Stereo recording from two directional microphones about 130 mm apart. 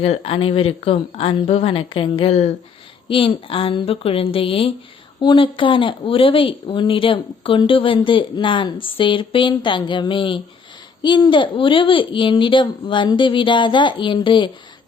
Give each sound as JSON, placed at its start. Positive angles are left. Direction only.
{"t": 0.0, "sound": "a woman's voice", "side_deg": 50}